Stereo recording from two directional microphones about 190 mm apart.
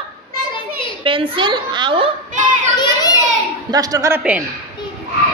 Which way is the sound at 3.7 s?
20° right (ahead or behind).